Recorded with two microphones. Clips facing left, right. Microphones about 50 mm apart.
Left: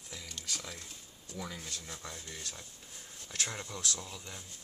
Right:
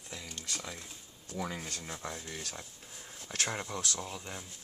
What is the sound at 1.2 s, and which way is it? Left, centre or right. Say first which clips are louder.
Speech: right 5 dB; right.